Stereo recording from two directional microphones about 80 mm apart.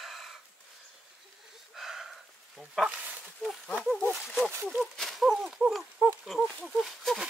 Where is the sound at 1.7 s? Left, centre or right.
Centre.